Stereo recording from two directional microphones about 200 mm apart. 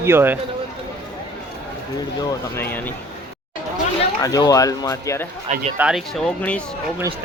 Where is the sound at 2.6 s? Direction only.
10° left (ahead or behind).